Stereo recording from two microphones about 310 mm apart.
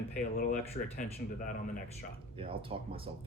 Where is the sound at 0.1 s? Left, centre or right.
Left.